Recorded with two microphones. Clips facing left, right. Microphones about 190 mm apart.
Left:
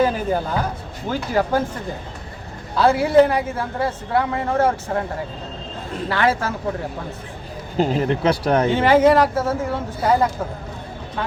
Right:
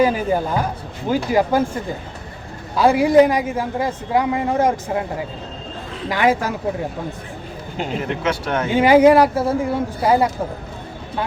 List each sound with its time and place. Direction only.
0.0 s a man's voice: 15° right (ahead or behind)
2.7 s a man's voice: 15° right (ahead or behind)
6.1 s a man's voice: 15° right (ahead or behind)
7.8 s speech: 35° left (ahead or behind)
8.7 s a man's voice: 10° right (ahead or behind)